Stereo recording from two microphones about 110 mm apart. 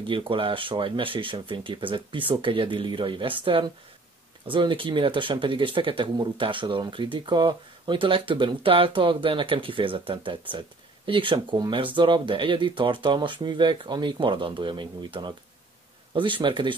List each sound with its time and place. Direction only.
0.0 s speech: 50° right (ahead or behind)